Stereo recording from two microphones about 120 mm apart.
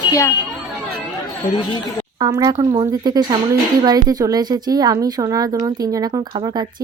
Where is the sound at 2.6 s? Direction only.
40° right (ahead or behind).